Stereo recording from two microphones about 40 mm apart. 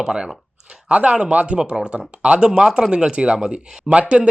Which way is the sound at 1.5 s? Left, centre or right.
Right.